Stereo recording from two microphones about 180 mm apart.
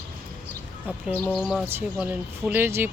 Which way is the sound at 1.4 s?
Centre (ahead or behind).